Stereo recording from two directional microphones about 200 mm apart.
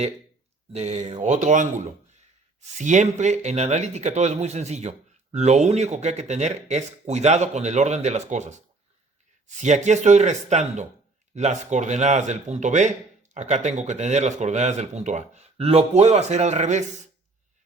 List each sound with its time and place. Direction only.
0.7 s speech: 35° right (ahead or behind)
9.6 s speech: 35° right (ahead or behind)